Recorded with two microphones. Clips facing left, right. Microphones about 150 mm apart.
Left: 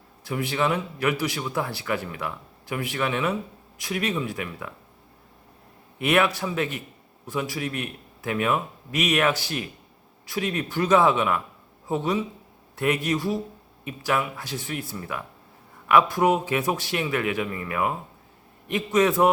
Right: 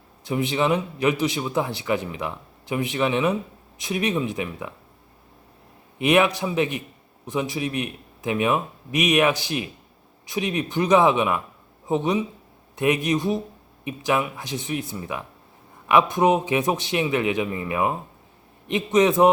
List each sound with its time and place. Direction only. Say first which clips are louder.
0.3 s speech: right 3 dB; 20° right (ahead or behind)
6.0 s a man's voice: right 3 dB; 15° right (ahead or behind)